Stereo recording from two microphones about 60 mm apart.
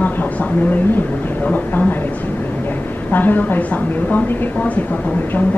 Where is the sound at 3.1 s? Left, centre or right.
Left.